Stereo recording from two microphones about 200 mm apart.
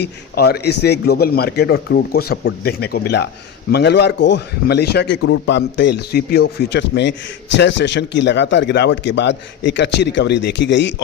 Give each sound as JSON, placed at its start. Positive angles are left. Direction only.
{"t": 0.0, "sound": "a man's voice", "side_deg": 55}